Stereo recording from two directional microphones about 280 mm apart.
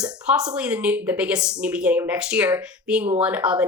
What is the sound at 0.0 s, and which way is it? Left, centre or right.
Speech, centre.